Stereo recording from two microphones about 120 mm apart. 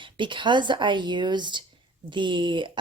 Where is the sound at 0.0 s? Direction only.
45° right (ahead or behind).